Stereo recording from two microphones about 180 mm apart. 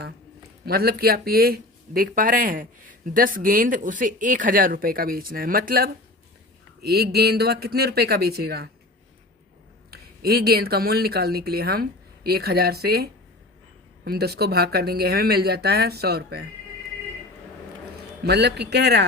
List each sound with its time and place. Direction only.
0.6 s speech: 60° right (ahead or behind)
9.9 s speech: 60° right (ahead or behind)
18.2 s speech: 65° right (ahead or behind)